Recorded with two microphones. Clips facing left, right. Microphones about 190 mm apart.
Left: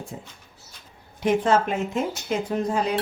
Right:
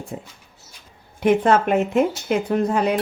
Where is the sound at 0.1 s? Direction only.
65° right (ahead or behind).